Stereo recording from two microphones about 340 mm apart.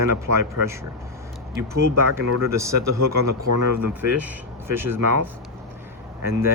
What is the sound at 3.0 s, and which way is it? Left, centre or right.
Speech, right.